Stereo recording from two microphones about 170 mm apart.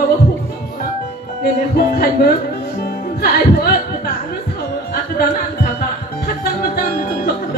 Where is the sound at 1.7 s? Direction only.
65° left (ahead or behind).